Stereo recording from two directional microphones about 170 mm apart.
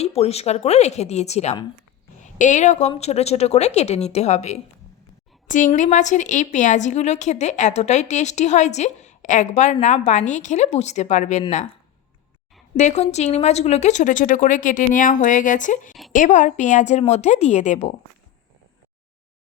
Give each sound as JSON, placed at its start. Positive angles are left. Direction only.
{"t": 0.0, "sound": "a woman's voice", "side_deg": 35}
{"t": 12.7, "sound": "a woman's voice", "side_deg": 45}